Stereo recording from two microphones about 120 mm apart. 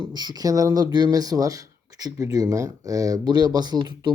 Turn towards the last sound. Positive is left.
turn(degrees=-35)  # may be behind; listen again after turning